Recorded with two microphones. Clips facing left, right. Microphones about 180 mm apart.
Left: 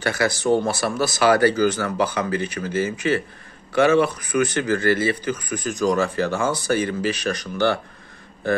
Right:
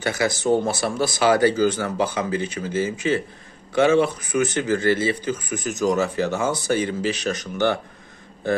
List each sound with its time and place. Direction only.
0.0 s speech: 20° right (ahead or behind)